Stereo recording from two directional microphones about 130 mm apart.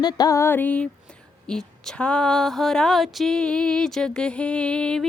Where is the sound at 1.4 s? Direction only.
5° left (ahead or behind).